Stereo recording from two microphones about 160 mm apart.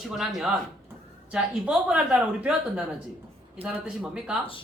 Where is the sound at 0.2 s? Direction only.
Centre (ahead or behind).